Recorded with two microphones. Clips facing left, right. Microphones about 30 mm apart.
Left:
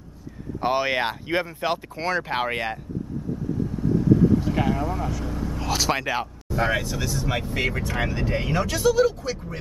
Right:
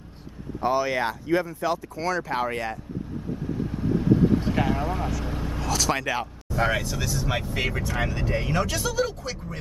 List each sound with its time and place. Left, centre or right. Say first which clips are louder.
0.6 s speech: left 1 dB; left
3.7 s vehicle: left 2 dB; right
4.7 s speech: left 1 dB; right
5.7 s speech: left 1 dB; centre
7.8 s speech: left 1 dB; centre